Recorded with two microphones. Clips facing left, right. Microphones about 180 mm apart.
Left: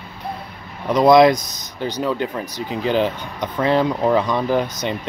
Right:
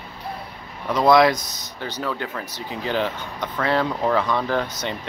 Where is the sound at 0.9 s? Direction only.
15° left (ahead or behind).